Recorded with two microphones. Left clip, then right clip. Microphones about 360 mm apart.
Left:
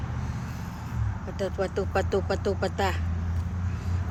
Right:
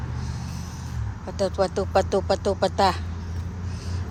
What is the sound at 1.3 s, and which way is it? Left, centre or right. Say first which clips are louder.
Speech: right 6 dB; centre.